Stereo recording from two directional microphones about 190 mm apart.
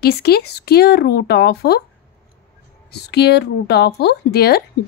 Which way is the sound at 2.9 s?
60° left (ahead or behind).